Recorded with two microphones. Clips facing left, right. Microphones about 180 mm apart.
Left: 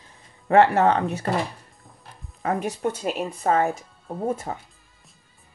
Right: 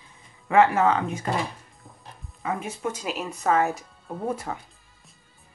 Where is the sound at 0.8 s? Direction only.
35° left (ahead or behind).